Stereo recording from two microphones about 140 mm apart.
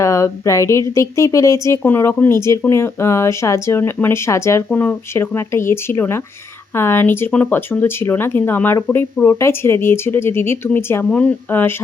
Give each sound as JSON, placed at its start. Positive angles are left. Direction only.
{"t": 0.0, "sound": "speech", "side_deg": 20}